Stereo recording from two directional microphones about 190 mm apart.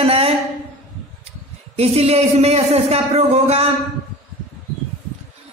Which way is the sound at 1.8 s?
35° right (ahead or behind).